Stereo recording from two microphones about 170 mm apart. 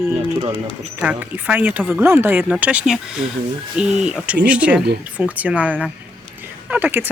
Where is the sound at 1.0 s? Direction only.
10° right (ahead or behind).